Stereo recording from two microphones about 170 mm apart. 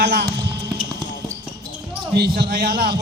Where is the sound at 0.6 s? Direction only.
30° right (ahead or behind).